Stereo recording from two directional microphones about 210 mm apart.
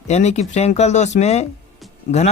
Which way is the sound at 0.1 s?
30° left (ahead or behind).